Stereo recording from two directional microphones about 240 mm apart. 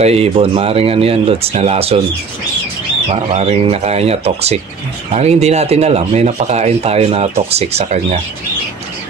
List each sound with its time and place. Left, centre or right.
0.0 s speech: right
3.3 s speech: right